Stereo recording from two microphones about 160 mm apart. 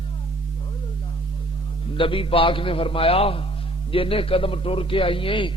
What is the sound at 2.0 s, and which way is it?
A man's voice, 35° left (ahead or behind).